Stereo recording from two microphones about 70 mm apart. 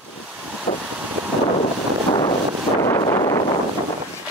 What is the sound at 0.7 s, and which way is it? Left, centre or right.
Vehicle, left.